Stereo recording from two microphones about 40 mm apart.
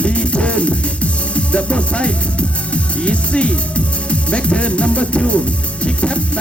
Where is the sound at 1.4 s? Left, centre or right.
Left.